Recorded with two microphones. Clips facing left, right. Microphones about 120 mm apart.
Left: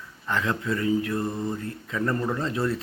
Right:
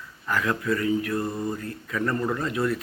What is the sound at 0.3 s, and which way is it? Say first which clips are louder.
Mantra: right 1 dB; 25° left (ahead or behind).